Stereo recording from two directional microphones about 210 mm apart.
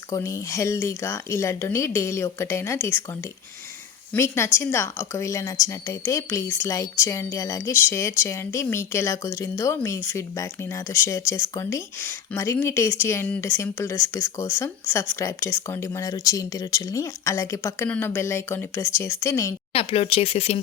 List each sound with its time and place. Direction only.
0.1 s speech: 15° left (ahead or behind)
4.1 s speech: 10° left (ahead or behind)
19.7 s speech: 30° left (ahead or behind)